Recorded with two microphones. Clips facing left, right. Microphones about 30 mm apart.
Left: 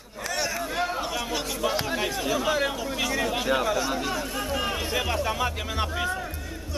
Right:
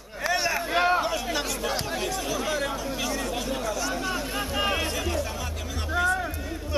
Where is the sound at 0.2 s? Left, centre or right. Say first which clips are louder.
Right 3 dB; centre.